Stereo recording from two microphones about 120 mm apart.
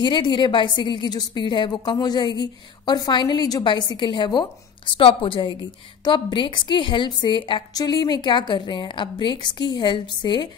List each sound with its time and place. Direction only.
0.0 s a woman's voice: 40° left (ahead or behind)